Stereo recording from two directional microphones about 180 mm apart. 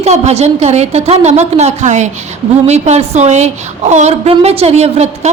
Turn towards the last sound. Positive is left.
turn(degrees=-40)  # may be behind; listen again after turning